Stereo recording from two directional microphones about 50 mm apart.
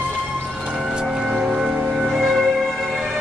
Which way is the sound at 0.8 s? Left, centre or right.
Centre.